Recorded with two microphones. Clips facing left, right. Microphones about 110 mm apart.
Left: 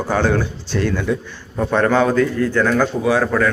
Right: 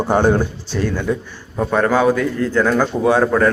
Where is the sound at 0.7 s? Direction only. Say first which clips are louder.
Even; 5° right (ahead or behind).